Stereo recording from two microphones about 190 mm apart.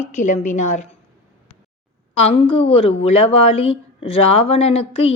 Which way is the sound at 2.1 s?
30° left (ahead or behind).